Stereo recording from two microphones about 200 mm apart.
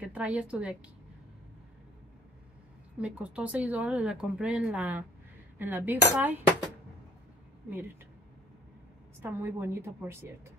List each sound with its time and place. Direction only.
0.0 s a woman's voice: 5° right (ahead or behind)
3.0 s speech: 5° right (ahead or behind)
9.2 s speech: 10° right (ahead or behind)